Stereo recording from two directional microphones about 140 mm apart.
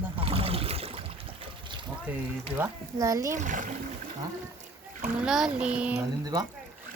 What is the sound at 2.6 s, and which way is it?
Speech, 20° right (ahead or behind).